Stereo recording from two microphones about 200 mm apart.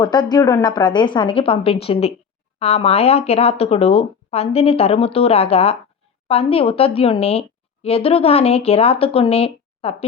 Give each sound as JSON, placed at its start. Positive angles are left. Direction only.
{"t": 0.0, "sound": "a woman's voice", "side_deg": 20}